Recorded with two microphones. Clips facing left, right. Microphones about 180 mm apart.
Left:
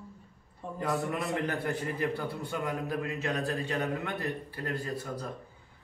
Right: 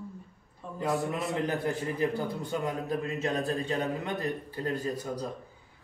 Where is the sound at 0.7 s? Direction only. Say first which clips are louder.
Right 2 dB; 20° right (ahead or behind).